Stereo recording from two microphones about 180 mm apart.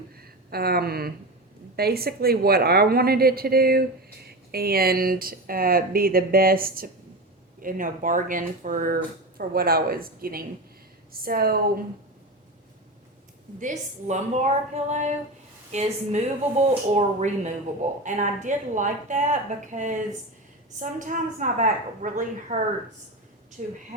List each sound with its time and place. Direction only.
0.2 s a woman's voice: 60° right (ahead or behind)
13.6 s a woman's voice: 45° right (ahead or behind)
23.6 s speech: 40° right (ahead or behind)